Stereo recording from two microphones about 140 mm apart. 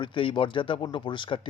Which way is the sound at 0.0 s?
35° left (ahead or behind).